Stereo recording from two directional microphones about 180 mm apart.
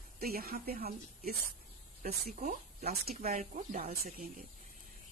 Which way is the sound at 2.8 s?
60° right (ahead or behind).